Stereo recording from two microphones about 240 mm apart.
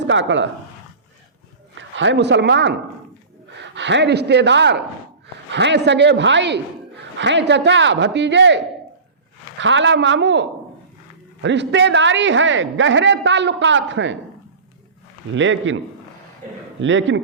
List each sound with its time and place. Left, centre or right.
0.0 s speech: right
1.7 s a man's voice: right
11.4 s a man's voice: right
15.4 s a man's voice: right
16.8 s a man's voice: right